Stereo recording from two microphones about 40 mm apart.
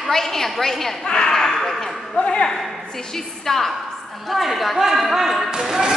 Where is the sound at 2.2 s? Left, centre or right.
Left.